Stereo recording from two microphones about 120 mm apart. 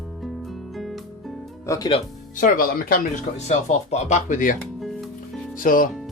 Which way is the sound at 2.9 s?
80° left.